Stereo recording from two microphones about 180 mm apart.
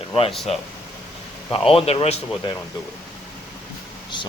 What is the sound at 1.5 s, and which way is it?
Speech, 30° left (ahead or behind).